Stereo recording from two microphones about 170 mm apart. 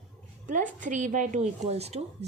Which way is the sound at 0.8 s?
45° right (ahead or behind).